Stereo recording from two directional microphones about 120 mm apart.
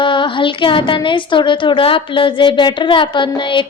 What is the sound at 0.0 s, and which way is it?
A woman's voice, 45° left (ahead or behind).